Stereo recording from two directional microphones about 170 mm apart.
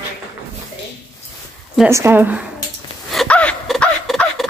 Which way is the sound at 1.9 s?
15° right (ahead or behind).